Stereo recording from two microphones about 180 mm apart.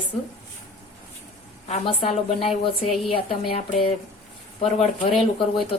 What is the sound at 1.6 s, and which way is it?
A woman's voice, 35° left (ahead or behind).